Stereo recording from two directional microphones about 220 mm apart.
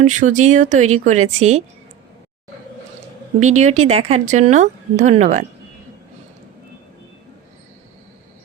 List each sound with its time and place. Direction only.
0.0 s speech: 35° right (ahead or behind)
3.4 s speech: 30° right (ahead or behind)